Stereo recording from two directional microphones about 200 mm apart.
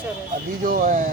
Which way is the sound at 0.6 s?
40° right (ahead or behind).